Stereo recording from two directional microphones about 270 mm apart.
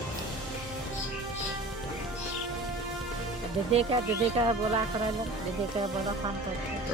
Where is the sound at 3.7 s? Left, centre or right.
Right.